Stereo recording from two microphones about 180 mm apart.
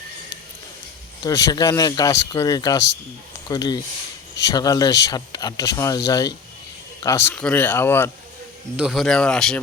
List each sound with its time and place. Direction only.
1.2 s speech: 20° left (ahead or behind)
8.7 s speech: 5° right (ahead or behind)